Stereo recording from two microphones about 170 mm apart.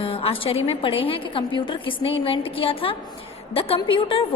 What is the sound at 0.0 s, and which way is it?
A woman's voice, 35° left (ahead or behind).